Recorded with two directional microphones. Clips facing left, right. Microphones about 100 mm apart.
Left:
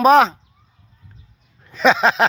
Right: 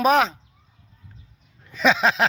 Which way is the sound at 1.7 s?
5° right (ahead or behind).